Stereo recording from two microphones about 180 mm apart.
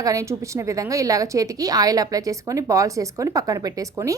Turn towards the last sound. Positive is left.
turn(degrees=-15)  # may be behind; listen again after turning